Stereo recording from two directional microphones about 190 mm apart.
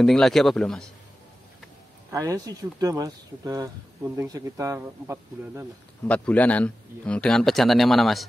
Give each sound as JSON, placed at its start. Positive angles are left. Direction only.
{"t": 0.0, "sound": "a man's voice", "side_deg": 0}
{"t": 2.0, "sound": "speech", "side_deg": -20}
{"t": 6.0, "sound": "a man's voice", "side_deg": 5}